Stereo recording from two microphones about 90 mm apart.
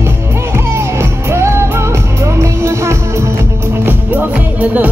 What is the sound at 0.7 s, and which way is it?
Music, 30° right (ahead or behind).